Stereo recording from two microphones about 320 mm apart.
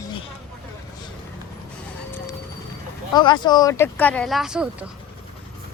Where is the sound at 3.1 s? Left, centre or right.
Centre.